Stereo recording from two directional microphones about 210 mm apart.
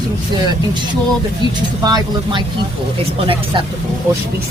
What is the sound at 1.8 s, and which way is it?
Speech, 20° right (ahead or behind).